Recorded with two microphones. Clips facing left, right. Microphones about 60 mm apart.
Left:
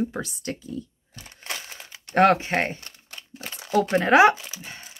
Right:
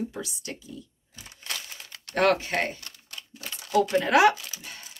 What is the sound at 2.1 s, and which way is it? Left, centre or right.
Speech, left.